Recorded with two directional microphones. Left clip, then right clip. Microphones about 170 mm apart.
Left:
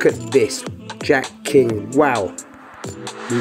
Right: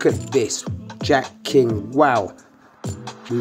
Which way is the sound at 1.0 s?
5° left (ahead or behind).